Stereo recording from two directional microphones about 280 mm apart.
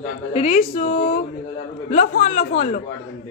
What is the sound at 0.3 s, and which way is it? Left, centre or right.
A woman's voice, left.